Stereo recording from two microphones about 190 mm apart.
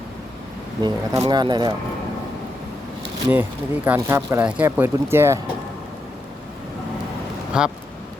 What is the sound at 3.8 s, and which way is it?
Speech, 10° right (ahead or behind).